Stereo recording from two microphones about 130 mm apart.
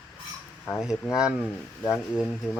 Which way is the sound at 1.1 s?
5° right (ahead or behind).